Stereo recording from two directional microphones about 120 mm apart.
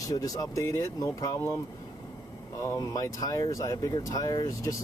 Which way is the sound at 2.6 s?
30° left (ahead or behind).